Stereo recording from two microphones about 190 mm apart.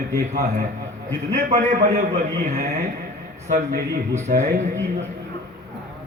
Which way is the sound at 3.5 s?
40° right (ahead or behind).